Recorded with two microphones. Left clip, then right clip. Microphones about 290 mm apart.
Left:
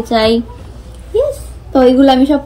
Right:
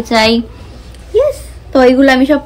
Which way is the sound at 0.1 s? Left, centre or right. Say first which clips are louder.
Right 1 dB; centre.